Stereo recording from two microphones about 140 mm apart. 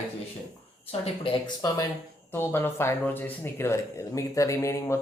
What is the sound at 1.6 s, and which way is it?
Speech, 25° left (ahead or behind).